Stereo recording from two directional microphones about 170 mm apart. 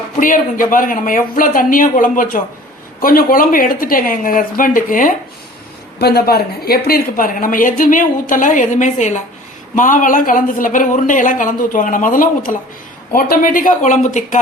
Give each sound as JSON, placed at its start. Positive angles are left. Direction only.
{"t": 0.2, "sound": "a woman's voice", "side_deg": 50}
{"t": 6.0, "sound": "a woman's voice", "side_deg": 70}